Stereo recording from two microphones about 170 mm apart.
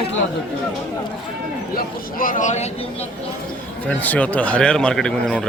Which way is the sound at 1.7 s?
55° left (ahead or behind).